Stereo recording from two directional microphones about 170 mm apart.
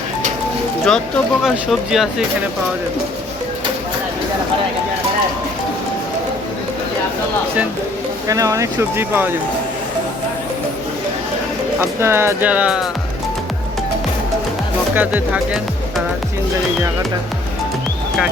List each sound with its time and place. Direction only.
0.9 s speech: 5° left (ahead or behind)
8.3 s speech: 20° right (ahead or behind)
11.8 s speech: 15° right (ahead or behind)
14.9 s speech: 10° right (ahead or behind)